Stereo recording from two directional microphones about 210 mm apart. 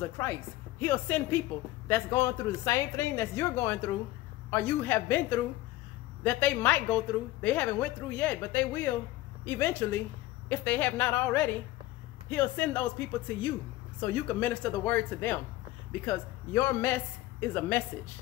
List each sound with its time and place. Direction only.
0.2 s a woman's voice: 10° left (ahead or behind)
6.2 s a woman's voice: 10° left (ahead or behind)
14.0 s a woman's voice: 10° left (ahead or behind)